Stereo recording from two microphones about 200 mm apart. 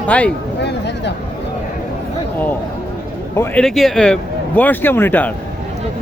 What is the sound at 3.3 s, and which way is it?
Speech, 5° left (ahead or behind).